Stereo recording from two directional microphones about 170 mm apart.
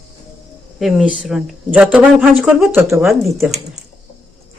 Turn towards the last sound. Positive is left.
turn(degrees=-40)  # may be behind; listen again after turning